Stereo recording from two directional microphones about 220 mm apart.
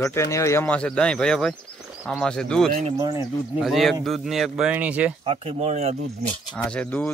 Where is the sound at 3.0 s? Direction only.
15° right (ahead or behind).